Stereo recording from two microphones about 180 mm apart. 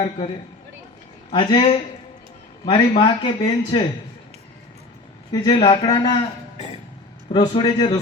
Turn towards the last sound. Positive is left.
turn(degrees=25)  # may be behind; listen again after turning